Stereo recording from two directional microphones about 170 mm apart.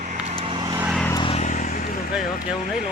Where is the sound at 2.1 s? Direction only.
5° right (ahead or behind).